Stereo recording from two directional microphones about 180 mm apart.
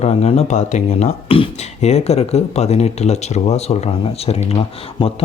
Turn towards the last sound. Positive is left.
turn(degrees=30)  # may be behind; listen again after turning